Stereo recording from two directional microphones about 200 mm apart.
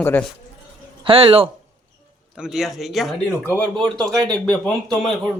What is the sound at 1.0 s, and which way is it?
Speech, 30° right (ahead or behind).